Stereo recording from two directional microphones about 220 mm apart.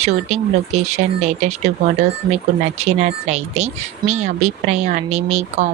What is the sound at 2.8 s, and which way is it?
Speech, 30° right (ahead or behind).